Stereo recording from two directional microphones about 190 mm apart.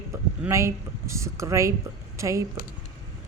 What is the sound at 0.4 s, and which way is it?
Speech, 15° right (ahead or behind).